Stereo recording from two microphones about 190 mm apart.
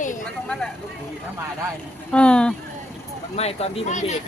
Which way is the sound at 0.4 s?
5° left (ahead or behind).